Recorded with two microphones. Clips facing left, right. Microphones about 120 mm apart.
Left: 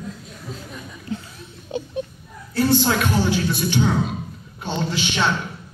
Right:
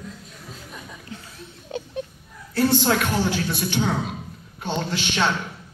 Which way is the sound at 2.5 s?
55° right (ahead or behind).